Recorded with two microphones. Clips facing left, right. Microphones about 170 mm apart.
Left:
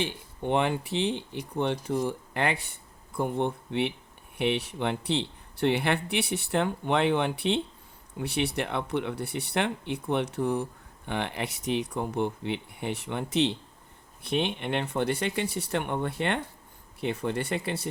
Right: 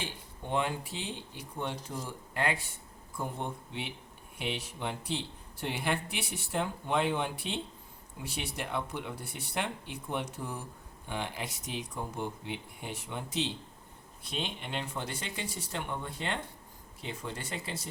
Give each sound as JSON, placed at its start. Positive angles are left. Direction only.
{"t": 0.0, "sound": "speech", "side_deg": 70}